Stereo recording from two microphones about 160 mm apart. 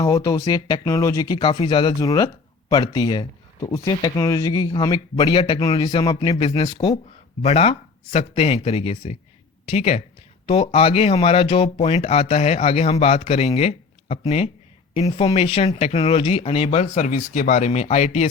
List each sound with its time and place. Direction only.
0.0 s speech: 20° left (ahead or behind); by 18.3 s 45° left (ahead or behind)